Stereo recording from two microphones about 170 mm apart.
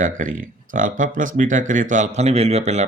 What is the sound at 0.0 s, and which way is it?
Speech, 50° right (ahead or behind).